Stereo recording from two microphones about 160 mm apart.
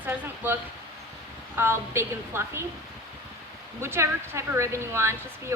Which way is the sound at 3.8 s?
15° right (ahead or behind).